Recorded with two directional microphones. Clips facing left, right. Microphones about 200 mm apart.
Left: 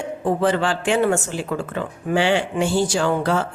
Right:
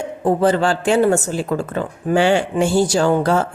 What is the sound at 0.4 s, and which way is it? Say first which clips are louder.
A woman's voice: right 4 dB; 40° right (ahead or behind).